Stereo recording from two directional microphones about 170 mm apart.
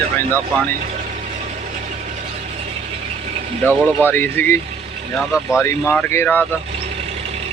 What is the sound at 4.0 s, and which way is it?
Speech, 10° left (ahead or behind).